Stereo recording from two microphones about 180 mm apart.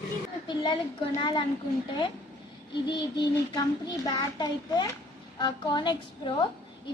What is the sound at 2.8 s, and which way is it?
Child singing, 25° left (ahead or behind).